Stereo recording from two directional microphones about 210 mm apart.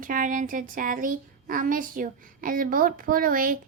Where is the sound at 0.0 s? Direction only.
40° right (ahead or behind).